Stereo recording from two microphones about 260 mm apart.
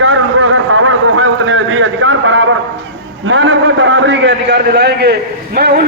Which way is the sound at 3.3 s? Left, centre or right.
Right.